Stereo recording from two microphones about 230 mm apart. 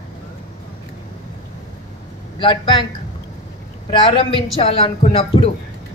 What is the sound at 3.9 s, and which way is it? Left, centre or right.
Speech, left.